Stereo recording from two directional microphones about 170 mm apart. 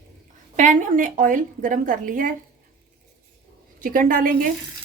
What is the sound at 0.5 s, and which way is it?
A woman's voice, 45° right (ahead or behind).